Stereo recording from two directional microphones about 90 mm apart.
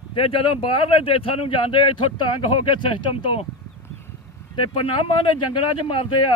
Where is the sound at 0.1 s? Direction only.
90° left.